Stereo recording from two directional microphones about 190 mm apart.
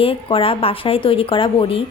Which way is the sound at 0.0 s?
30° left (ahead or behind).